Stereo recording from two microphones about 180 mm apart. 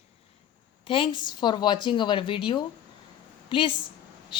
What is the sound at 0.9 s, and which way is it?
Speech, 30° left (ahead or behind).